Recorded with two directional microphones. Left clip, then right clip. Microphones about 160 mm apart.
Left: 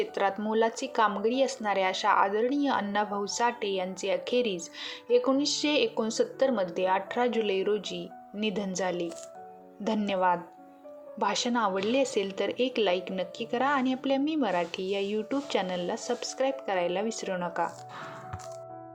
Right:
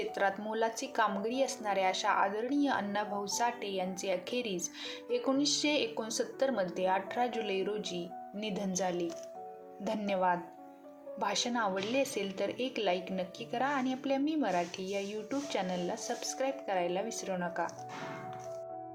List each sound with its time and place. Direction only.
0.1 s a woman's voice: 30° left (ahead or behind)